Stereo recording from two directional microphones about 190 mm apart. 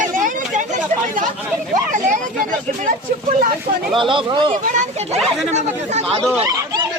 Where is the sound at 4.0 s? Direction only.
25° right (ahead or behind).